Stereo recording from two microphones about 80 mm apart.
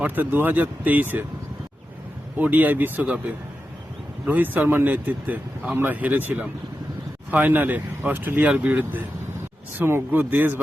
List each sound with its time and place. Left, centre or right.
0.0 s speech: right
2.4 s speech: right